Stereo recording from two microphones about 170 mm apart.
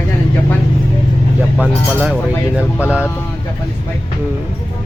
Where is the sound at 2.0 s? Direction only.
5° right (ahead or behind).